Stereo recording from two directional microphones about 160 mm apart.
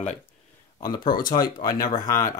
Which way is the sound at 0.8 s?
25° left (ahead or behind).